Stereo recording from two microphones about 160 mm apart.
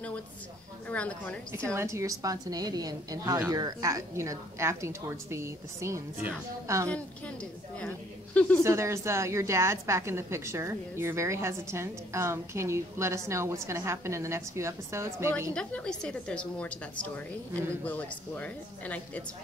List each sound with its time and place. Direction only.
0.8 s a woman's voice: 10° left (ahead or behind)
1.7 s a woman's voice: 20° right (ahead or behind)
8.6 s a woman's voice: 15° right (ahead or behind)
15.5 s a woman's voice: 5° left (ahead or behind)